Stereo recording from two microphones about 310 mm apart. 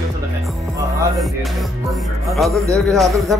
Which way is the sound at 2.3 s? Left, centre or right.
Centre.